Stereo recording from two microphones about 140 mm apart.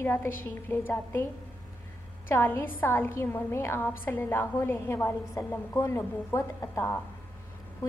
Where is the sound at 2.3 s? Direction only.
15° left (ahead or behind).